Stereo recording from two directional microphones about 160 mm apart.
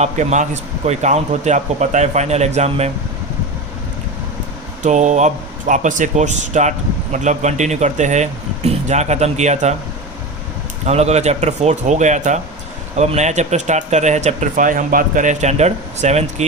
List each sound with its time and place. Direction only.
0.0 s speech: 45° right (ahead or behind)
4.8 s speech: 50° right (ahead or behind)
10.8 s speech: 45° right (ahead or behind)